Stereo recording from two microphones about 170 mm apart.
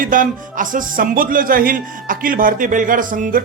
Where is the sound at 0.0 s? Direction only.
50° right (ahead or behind).